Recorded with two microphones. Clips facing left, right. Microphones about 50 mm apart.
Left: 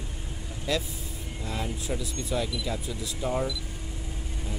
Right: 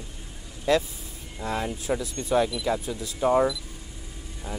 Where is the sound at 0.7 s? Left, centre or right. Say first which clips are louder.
Right 7 dB; right.